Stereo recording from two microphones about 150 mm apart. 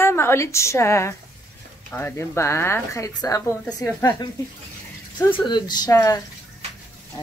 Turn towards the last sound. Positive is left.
turn(degrees=20)  # may be behind; listen again after turning